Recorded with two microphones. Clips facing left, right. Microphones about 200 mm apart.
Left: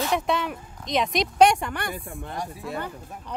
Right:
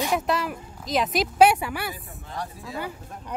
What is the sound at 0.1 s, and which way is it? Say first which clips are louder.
Speech: even; centre (ahead or behind).